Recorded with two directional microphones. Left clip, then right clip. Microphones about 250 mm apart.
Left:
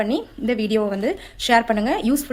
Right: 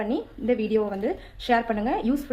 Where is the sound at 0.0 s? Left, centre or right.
Left.